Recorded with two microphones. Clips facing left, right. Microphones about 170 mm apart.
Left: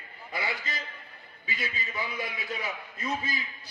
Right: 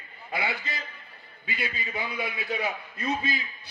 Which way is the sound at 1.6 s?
60° right (ahead or behind).